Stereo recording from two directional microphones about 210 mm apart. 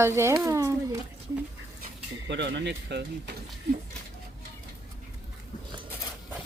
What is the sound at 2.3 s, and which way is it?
Speech, 55° right (ahead or behind).